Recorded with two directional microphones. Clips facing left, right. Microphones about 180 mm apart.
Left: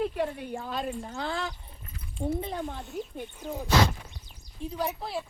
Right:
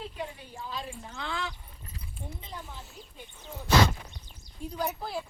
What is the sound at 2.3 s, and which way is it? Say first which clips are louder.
Speech: left 11 dB; 60° left (ahead or behind).